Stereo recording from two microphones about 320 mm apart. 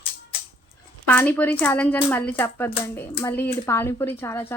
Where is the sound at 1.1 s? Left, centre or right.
Centre.